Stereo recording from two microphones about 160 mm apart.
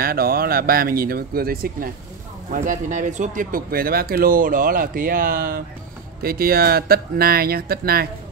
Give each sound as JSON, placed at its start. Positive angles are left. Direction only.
{"t": 0.0, "sound": "speech", "side_deg": -70}
{"t": 2.5, "sound": "speech", "side_deg": -55}